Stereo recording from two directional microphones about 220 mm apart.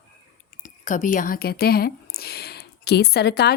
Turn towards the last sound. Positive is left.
turn(degrees=50)  # may be behind; listen again after turning